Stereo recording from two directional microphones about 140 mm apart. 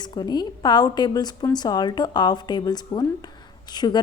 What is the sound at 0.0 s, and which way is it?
A woman's voice, 30° left (ahead or behind).